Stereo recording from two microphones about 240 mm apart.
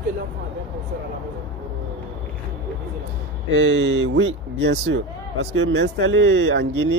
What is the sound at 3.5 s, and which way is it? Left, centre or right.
Speech, right.